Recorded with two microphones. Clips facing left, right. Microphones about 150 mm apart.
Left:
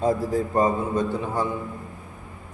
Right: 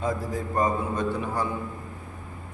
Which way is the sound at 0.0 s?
30° left (ahead or behind).